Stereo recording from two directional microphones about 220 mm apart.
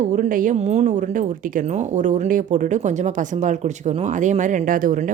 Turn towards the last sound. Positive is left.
turn(degrees=-35)  # may be behind; listen again after turning